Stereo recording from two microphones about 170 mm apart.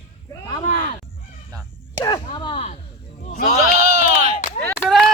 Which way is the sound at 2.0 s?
25° left (ahead or behind).